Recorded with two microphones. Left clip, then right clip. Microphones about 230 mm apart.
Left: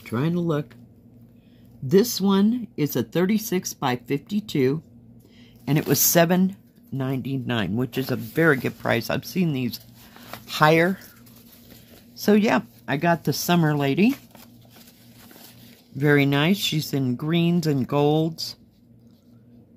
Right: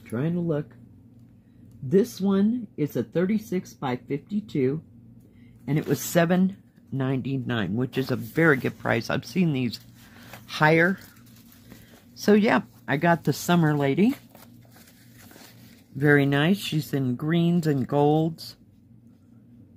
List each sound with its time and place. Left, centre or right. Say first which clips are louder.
0.1 s speech: left 3 dB; left
1.9 s speech: left 3 dB; left
6.1 s speech: left 2 dB; centre
6.9 s speech: even; centre
12.2 s speech: even; centre
16.0 s speech: left 1 dB; centre